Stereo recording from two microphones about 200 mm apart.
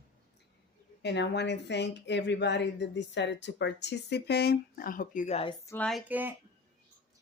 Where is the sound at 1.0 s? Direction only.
60° left (ahead or behind); by 5.5 s 30° left (ahead or behind).